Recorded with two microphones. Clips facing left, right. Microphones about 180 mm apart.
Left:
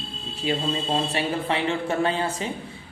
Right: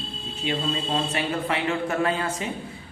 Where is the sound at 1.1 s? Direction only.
30° left (ahead or behind).